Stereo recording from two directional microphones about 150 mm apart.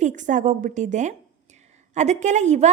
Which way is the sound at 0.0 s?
55° right (ahead or behind).